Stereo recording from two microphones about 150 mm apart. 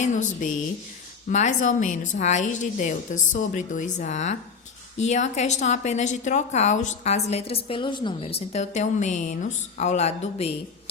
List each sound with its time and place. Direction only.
0.0 s a woman's voice: 55° left (ahead or behind)